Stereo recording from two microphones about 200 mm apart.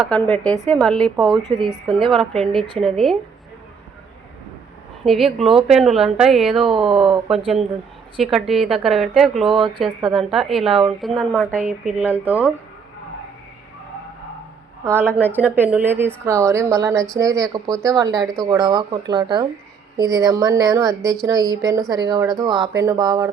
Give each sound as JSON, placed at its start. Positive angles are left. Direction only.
{"t": 0.0, "sound": "a woman's voice", "side_deg": 5}
{"t": 1.5, "sound": "speech", "side_deg": -25}
{"t": 1.7, "sound": "a woman's voice", "side_deg": 0}
{"t": 5.0, "sound": "a woman's voice", "side_deg": 0}
{"t": 12.0, "sound": "speech", "side_deg": -10}
{"t": 14.8, "sound": "speech", "side_deg": -10}